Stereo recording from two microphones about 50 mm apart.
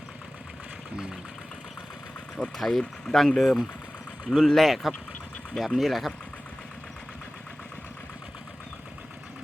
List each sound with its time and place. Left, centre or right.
2.6 s speech: centre